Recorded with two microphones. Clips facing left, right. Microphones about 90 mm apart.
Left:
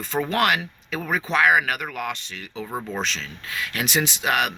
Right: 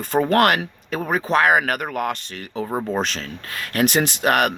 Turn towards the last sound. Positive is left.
turn(degrees=-50)  # may be behind; listen again after turning